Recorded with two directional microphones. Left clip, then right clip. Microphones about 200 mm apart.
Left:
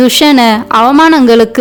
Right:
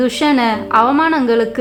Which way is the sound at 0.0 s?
50° left (ahead or behind).